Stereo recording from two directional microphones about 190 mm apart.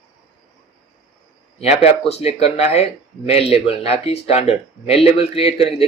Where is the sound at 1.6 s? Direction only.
35° left (ahead or behind).